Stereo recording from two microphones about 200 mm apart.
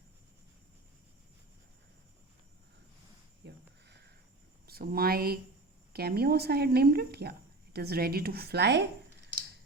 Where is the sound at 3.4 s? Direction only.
55° right (ahead or behind).